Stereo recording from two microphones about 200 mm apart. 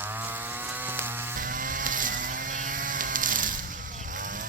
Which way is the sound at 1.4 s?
45° right (ahead or behind).